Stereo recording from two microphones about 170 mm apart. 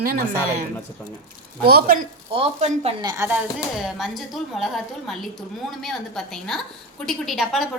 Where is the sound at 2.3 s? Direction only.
40° right (ahead or behind).